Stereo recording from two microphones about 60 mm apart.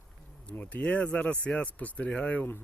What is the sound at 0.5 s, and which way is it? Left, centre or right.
Speech, left.